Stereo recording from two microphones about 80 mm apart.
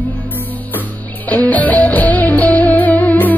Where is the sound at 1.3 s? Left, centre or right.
Left.